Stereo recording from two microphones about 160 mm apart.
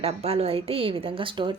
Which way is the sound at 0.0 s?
40° right (ahead or behind).